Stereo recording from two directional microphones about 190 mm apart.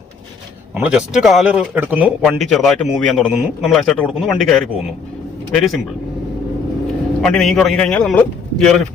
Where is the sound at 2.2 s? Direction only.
Centre (ahead or behind).